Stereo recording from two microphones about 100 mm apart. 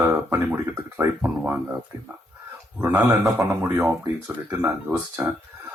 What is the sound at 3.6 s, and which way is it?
Speech, 20° right (ahead or behind).